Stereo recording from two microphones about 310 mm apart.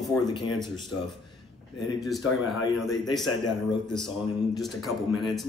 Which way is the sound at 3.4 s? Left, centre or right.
Centre.